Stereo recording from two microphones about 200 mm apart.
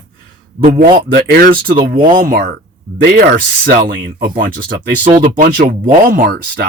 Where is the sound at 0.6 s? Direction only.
40° right (ahead or behind).